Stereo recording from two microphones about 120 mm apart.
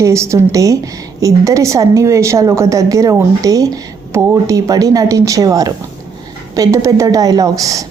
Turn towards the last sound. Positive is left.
turn(degrees=-30)  # may be behind; listen again after turning